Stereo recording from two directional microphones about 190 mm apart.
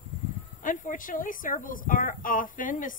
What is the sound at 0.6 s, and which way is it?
A woman's voice, 45° left (ahead or behind).